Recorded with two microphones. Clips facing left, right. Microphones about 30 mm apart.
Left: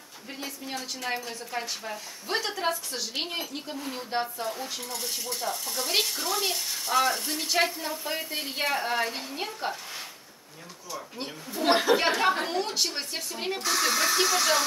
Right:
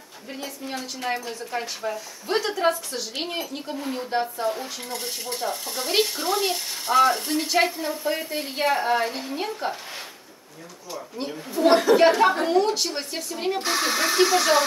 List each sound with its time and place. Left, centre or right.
0.3 s a woman's voice: centre
4.8 s speech: right; by 9.8 s centre
11.1 s a woman's voice: centre
13.6 s speech: right